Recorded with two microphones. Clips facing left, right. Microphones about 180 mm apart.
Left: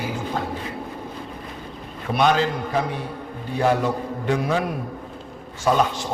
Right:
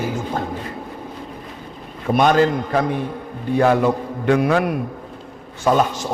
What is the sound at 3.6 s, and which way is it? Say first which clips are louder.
A man's voice: right 4 dB; 60° right (ahead or behind).